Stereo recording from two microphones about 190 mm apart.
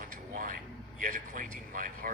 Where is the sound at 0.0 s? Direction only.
45° right (ahead or behind).